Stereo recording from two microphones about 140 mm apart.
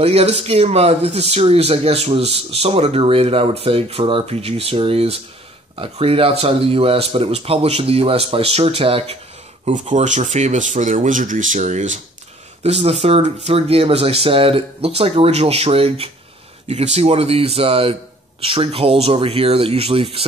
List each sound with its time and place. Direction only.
0.0 s speech: 45° right (ahead or behind)
9.8 s speech: 60° right (ahead or behind); by 20.2 s 45° right (ahead or behind)